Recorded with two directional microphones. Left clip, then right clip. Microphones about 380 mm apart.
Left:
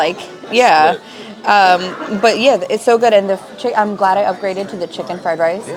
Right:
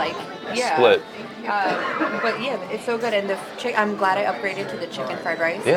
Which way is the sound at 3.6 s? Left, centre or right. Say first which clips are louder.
Left 7 dB; left.